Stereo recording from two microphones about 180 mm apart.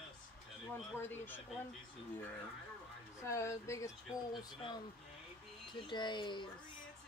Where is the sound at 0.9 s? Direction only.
10° left (ahead or behind).